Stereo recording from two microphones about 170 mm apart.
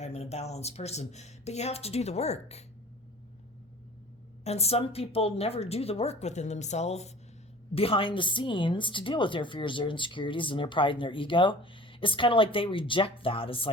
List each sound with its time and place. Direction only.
0.0 s speech: 40° left (ahead or behind)
4.4 s speech: 35° left (ahead or behind)